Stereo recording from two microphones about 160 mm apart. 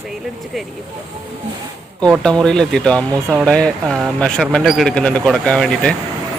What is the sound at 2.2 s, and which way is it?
Speech, 5° left (ahead or behind).